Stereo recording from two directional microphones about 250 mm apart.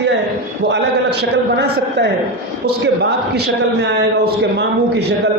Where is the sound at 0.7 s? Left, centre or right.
Right.